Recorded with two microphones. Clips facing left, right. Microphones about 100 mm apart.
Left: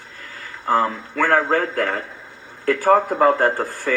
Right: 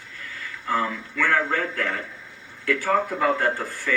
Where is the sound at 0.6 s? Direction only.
40° left (ahead or behind).